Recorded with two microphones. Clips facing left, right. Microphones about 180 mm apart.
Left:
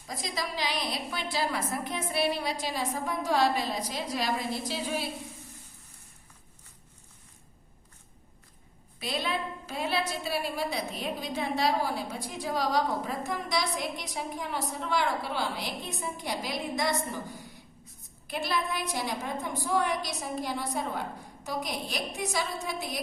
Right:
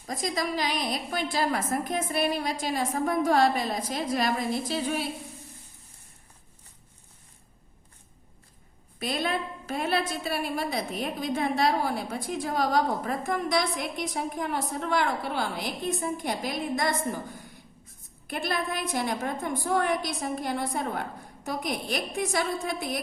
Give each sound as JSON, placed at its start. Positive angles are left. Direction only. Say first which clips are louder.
{"t": 0.1, "sound": "a woman's voice", "louder": "right 6 dB", "side_deg": -50}
{"t": 9.0, "sound": "a woman's voice", "louder": "right 3 dB", "side_deg": -50}